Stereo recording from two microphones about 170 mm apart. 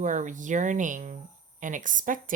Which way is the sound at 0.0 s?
50° right (ahead or behind).